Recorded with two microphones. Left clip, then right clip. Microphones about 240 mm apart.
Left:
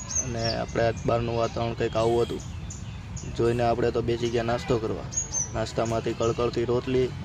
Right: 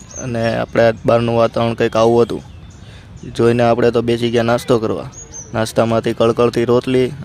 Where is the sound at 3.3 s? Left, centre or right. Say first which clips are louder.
Right 11 dB; right.